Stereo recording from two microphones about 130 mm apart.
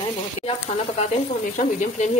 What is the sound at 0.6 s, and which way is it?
Speech, 60° left (ahead or behind).